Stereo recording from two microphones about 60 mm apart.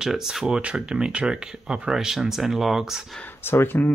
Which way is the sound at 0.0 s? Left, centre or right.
Centre.